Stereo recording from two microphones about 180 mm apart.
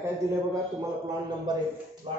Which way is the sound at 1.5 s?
25° right (ahead or behind).